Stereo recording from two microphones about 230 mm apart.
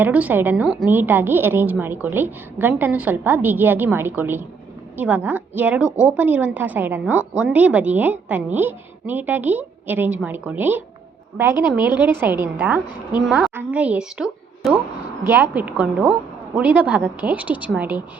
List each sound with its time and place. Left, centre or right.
0.0 s a woman's voice: centre